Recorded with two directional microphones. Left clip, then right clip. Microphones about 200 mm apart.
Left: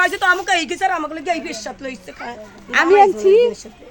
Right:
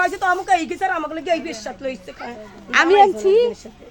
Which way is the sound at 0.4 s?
35° left (ahead or behind).